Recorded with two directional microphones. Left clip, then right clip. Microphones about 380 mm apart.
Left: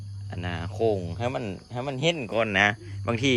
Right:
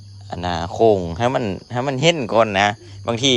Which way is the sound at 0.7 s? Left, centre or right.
Right.